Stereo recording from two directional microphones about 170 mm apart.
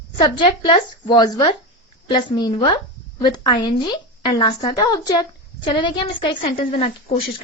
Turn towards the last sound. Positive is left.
turn(degrees=35)  # may be behind; listen again after turning